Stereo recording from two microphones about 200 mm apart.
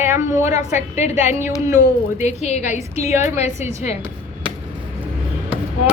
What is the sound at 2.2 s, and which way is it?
Speech, 35° left (ahead or behind).